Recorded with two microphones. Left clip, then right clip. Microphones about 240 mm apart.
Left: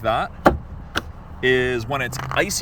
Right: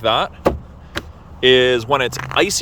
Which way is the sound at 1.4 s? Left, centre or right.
Centre.